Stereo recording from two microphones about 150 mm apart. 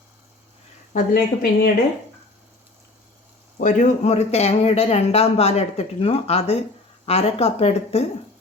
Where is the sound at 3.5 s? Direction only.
55° left (ahead or behind).